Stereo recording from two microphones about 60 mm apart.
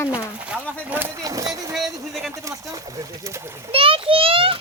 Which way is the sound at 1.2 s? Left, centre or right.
Right.